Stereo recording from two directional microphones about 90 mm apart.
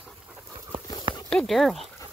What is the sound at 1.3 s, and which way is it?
Speech, 5° left (ahead or behind).